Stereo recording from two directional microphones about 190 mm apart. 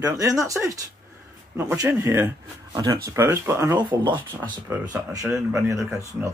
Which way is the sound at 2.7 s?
20° right (ahead or behind).